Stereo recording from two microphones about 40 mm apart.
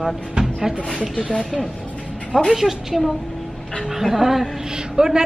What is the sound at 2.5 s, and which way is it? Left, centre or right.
A man's voice, centre.